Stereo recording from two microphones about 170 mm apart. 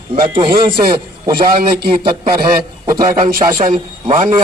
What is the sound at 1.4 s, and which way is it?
Speech, 60° right (ahead or behind).